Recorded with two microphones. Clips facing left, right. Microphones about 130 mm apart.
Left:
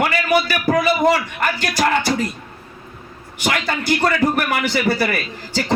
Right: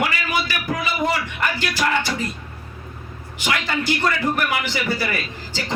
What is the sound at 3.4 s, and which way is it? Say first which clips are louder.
A man's voice: left 2 dB; 45° left (ahead or behind).